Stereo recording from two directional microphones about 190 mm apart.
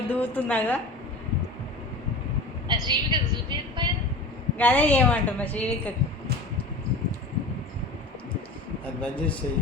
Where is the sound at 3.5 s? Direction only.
25° right (ahead or behind).